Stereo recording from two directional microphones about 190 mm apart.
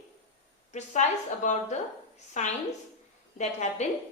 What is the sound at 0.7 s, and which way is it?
A woman's voice, 40° left (ahead or behind).